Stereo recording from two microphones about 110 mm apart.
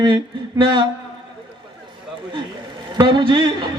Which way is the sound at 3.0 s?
50° right (ahead or behind).